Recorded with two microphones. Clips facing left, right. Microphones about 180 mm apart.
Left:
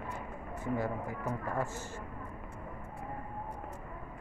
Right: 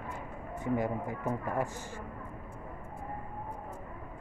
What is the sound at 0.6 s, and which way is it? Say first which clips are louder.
Speech: right 3 dB; 20° right (ahead or behind).